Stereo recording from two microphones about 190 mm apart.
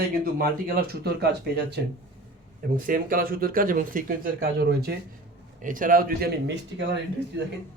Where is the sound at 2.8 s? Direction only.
45° right (ahead or behind).